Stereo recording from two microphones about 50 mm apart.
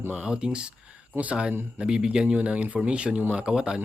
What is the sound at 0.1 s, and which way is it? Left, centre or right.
Speech, centre.